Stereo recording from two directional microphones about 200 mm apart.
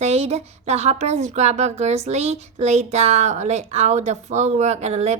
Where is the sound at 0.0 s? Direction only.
30° right (ahead or behind).